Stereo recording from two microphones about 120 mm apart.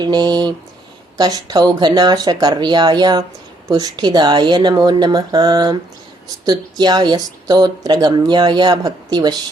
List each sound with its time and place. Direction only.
0.0 s speech: 35° right (ahead or behind)